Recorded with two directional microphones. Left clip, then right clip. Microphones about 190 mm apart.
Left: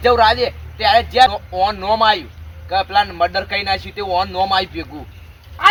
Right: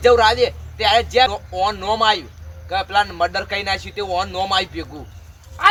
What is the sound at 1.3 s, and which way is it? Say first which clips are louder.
Speech: left 3 dB; 15° right (ahead or behind).